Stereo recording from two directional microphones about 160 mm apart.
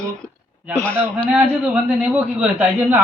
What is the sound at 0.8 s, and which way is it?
Speech, 10° left (ahead or behind).